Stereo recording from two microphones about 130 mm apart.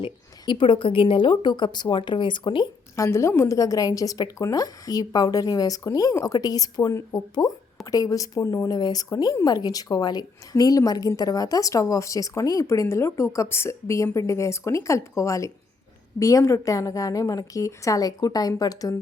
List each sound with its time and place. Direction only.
0.0 s speech: 40° left (ahead or behind)
2.9 s a woman's voice: 25° left (ahead or behind)